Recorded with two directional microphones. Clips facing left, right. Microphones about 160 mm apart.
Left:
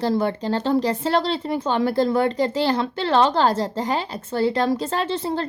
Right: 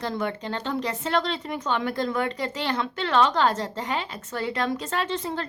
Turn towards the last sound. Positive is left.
turn(degrees=30)  # may be behind; listen again after turning